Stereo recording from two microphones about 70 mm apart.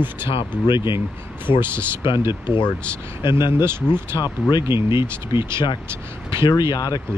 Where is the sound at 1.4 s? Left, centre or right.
Right.